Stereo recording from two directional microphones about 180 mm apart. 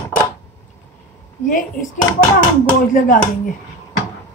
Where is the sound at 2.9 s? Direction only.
50° left (ahead or behind).